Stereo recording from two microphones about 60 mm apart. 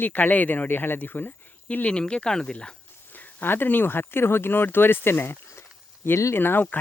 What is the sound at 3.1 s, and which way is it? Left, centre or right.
Speech, left.